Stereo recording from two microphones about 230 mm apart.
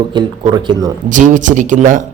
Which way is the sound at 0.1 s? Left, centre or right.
Centre.